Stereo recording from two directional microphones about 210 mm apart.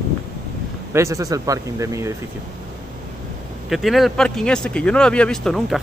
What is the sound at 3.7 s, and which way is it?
Speech, centre (ahead or behind).